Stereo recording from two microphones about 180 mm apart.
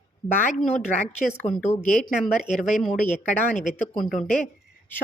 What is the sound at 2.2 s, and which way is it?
Speech, centre (ahead or behind).